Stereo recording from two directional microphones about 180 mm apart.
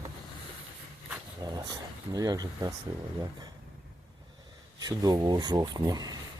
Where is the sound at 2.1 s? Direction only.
20° right (ahead or behind).